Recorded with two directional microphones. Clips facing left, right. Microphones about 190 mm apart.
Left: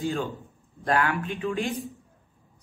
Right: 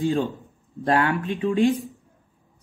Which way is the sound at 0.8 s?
25° right (ahead or behind).